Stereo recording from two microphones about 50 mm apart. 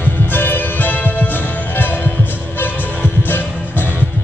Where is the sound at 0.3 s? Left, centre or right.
Left.